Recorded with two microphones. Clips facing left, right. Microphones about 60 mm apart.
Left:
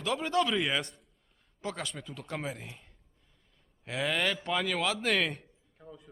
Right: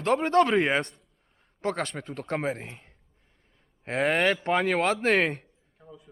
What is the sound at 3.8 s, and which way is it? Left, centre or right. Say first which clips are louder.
A man's voice: right 7 dB; right.